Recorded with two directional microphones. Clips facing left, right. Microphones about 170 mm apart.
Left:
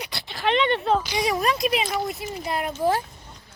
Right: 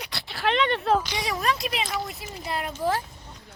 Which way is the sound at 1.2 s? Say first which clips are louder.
Left 4 dB; 15° left (ahead or behind).